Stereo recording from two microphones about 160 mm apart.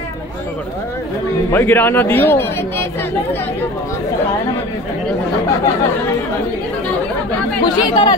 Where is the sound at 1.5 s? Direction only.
10° left (ahead or behind).